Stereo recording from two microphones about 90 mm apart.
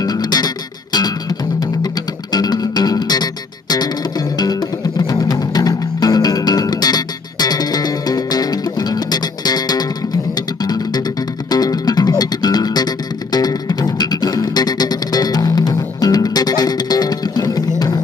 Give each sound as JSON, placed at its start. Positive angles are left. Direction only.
{"t": 0.0, "sound": "music", "side_deg": 50}
{"t": 2.3, "sound": "music", "side_deg": 50}